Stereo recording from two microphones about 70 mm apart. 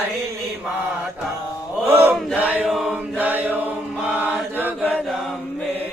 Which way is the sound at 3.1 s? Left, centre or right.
Right.